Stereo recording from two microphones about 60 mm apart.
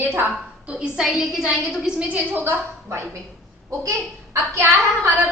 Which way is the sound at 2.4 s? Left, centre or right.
Right.